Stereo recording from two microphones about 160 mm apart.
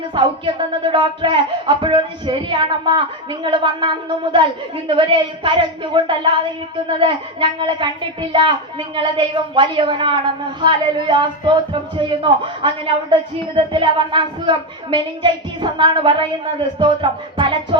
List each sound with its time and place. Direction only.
0.1 s speech: 30° right (ahead or behind)